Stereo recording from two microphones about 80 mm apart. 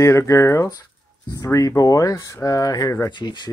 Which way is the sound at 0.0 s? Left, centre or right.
Left.